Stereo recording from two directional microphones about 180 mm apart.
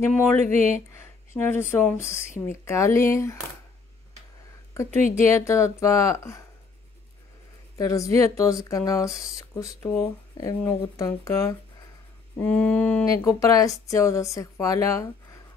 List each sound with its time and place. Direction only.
0.0 s speech: 10° left (ahead or behind)
0.4 s speech: 40° right (ahead or behind)
0.9 s a sound: 15° left (ahead or behind)
2.0 s speech: 15° left (ahead or behind)
5.3 s speech: 15° left (ahead or behind)
7.7 s speech: 20° left (ahead or behind)